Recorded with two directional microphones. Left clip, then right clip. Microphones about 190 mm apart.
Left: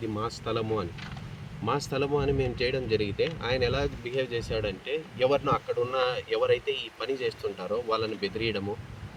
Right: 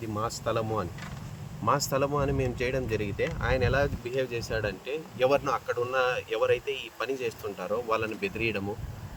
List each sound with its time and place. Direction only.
0.1 s speech: 5° right (ahead or behind)